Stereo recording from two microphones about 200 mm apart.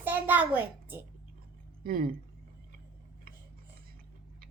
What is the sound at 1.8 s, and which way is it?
Speech, 45° right (ahead or behind).